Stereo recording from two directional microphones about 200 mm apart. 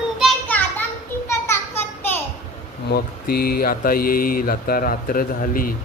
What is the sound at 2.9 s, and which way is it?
Speech, 50° left (ahead or behind).